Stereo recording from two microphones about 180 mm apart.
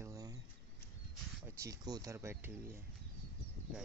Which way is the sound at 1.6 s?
20° right (ahead or behind).